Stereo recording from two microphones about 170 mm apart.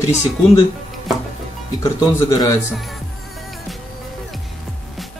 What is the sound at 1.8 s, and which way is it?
Speech, 20° left (ahead or behind).